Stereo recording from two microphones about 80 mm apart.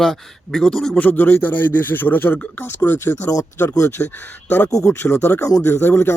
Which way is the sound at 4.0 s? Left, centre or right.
Left.